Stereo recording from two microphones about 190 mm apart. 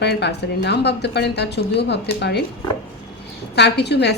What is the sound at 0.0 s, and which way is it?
A woman's voice, 60° left (ahead or behind).